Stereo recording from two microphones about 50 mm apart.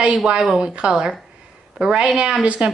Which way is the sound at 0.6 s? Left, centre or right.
Right.